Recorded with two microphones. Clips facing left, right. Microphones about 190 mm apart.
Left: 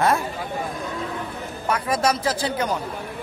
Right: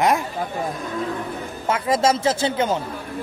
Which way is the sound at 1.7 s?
25° right (ahead or behind).